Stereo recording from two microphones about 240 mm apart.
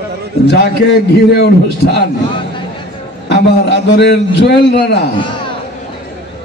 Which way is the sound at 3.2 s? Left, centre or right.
Left.